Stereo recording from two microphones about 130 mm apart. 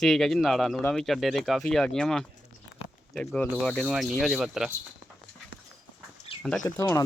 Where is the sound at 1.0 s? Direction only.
Centre (ahead or behind).